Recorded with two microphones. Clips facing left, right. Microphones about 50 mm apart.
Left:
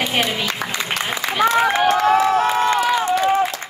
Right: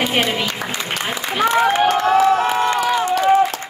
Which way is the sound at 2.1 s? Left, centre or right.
Left.